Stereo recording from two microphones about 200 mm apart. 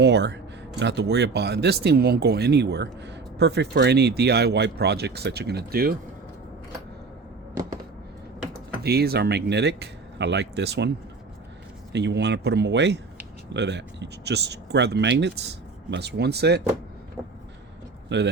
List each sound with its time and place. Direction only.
0.0 s speech: 60° right (ahead or behind)
8.8 s speech: 55° right (ahead or behind)
18.1 s speech: 60° right (ahead or behind)